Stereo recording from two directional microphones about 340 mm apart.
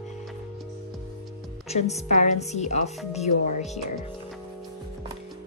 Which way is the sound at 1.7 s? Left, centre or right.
Centre.